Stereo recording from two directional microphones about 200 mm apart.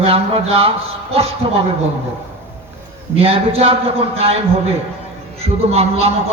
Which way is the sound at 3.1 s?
30° right (ahead or behind).